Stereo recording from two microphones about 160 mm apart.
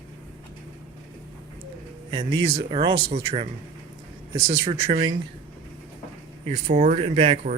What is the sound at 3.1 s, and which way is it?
Speech, 35° right (ahead or behind).